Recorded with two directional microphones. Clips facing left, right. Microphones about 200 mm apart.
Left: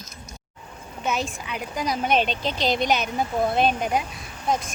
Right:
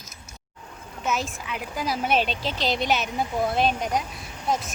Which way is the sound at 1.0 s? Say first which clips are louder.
Left 1 dB; centre (ahead or behind).